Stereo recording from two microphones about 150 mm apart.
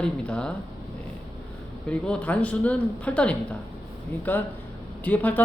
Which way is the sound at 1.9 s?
10° left (ahead or behind).